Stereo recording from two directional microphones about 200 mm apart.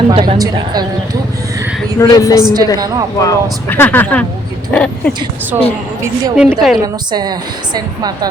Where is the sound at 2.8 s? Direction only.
20° right (ahead or behind).